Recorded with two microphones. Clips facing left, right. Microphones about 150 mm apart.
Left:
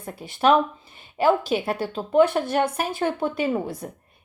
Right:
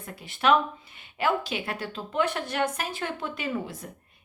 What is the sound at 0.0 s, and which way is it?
A woman's voice, 35° left (ahead or behind).